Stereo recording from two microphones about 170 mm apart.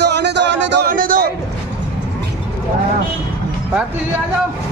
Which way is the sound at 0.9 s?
55° right (ahead or behind).